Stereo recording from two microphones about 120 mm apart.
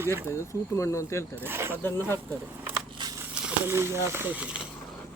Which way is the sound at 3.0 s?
40° right (ahead or behind).